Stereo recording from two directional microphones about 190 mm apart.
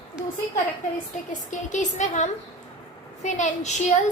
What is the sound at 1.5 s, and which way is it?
Speech, 40° left (ahead or behind).